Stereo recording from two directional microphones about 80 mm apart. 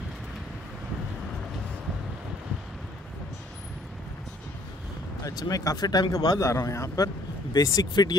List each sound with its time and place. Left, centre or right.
5.2 s a man's voice: left